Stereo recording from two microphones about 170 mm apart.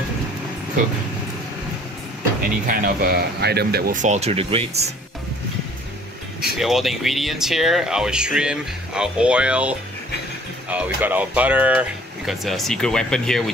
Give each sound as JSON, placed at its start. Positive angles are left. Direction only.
{"t": 2.6, "sound": "speech", "side_deg": -60}
{"t": 6.6, "sound": "speech", "side_deg": 0}